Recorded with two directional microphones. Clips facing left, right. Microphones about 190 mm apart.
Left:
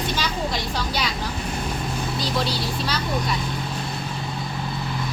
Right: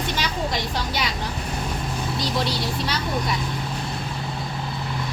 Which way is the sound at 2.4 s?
20° right (ahead or behind).